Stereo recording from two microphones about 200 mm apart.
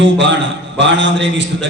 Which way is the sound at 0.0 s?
65° right (ahead or behind).